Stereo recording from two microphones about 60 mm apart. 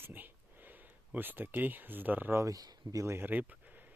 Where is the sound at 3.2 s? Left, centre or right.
Right.